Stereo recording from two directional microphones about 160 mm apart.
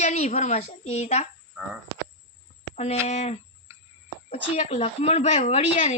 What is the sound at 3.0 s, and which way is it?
Speech, 45° left (ahead or behind).